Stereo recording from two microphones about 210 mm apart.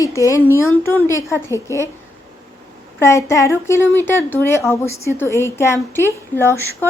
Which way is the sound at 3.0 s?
15° left (ahead or behind).